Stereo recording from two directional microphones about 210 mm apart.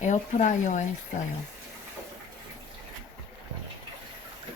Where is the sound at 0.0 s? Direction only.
35° left (ahead or behind).